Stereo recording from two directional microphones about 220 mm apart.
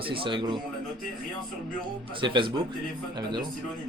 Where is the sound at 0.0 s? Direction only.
25° right (ahead or behind).